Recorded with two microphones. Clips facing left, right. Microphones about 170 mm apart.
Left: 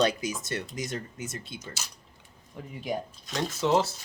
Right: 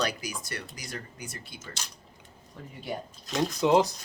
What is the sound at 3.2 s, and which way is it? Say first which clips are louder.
Speech: right 7 dB; centre (ahead or behind).